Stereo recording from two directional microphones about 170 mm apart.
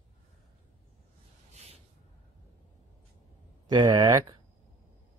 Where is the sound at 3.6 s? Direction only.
25° right (ahead or behind).